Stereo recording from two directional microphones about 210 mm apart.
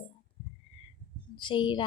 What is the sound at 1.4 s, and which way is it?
Speech, 20° left (ahead or behind).